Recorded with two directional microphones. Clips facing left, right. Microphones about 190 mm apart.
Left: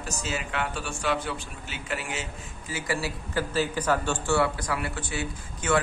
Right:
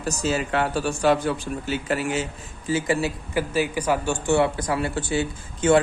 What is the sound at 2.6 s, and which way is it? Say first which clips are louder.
Speech: right 8 dB; 25° right (ahead or behind).